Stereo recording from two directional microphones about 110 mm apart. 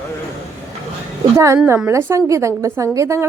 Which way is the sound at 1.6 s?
25° right (ahead or behind).